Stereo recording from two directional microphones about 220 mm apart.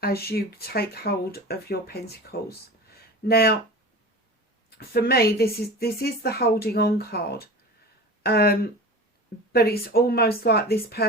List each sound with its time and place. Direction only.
0.0 s speech: 45° left (ahead or behind)
4.8 s speech: 45° left (ahead or behind)